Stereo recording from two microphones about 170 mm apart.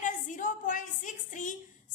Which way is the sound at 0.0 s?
50° left (ahead or behind).